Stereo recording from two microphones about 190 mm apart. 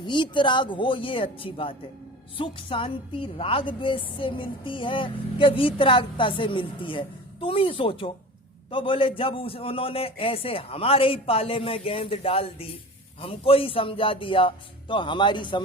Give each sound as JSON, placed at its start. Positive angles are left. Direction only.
{"t": 0.0, "sound": "a woman's voice", "side_deg": 25}